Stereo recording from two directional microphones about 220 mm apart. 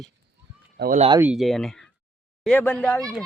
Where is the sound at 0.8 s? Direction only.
35° right (ahead or behind).